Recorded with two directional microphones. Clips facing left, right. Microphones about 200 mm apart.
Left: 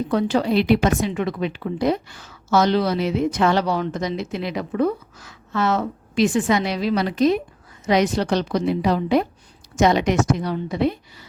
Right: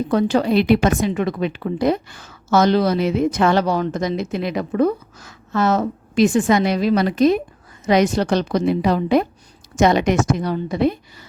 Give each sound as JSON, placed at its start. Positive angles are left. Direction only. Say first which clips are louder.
{"t": 0.1, "sound": "a woman's voice", "louder": "right 3 dB", "side_deg": -45}